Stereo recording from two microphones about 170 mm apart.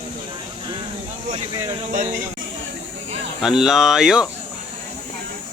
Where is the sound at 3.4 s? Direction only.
Centre (ahead or behind).